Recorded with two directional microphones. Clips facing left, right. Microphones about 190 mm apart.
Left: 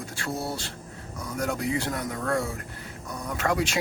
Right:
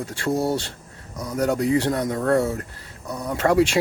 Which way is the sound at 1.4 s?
35° right (ahead or behind).